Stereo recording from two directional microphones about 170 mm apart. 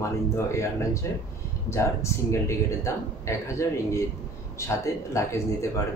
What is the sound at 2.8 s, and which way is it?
Speech, 15° left (ahead or behind).